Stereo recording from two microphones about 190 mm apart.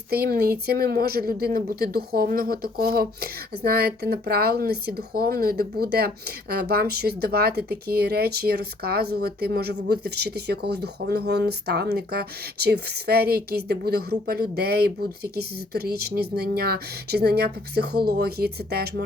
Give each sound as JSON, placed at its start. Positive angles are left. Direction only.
{"t": 0.1, "sound": "a woman's voice", "side_deg": -55}